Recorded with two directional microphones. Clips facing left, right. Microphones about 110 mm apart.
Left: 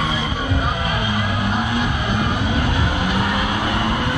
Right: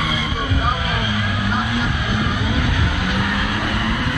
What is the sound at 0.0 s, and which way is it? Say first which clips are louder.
Vehicle: left 1 dB; 25° left (ahead or behind).